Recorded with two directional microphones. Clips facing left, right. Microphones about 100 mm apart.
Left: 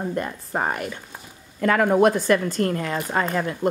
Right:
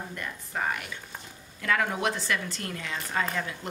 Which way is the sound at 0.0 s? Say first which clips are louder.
Left 11 dB; 40° left (ahead or behind).